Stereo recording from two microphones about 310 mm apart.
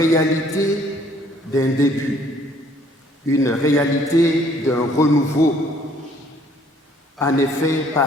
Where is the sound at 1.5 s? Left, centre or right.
Centre.